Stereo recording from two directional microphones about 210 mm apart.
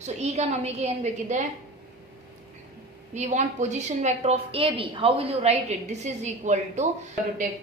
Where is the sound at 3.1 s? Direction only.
35° right (ahead or behind).